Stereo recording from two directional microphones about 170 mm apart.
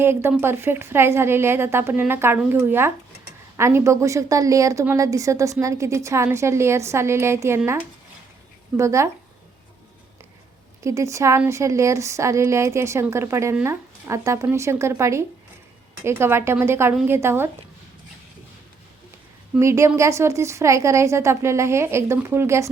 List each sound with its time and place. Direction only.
0.0 s a woman's voice: 15° right (ahead or behind)
10.8 s a woman's voice: 15° right (ahead or behind)
19.5 s a woman's voice: 15° right (ahead or behind)